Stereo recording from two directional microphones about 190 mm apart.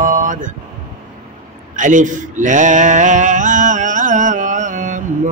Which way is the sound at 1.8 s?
40° right (ahead or behind).